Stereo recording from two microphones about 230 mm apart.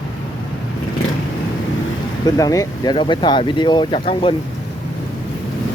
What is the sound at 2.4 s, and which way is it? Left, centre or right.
Speech, centre.